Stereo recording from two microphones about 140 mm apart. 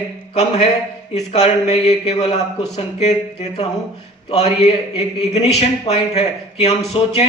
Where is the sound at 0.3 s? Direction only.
50° left (ahead or behind).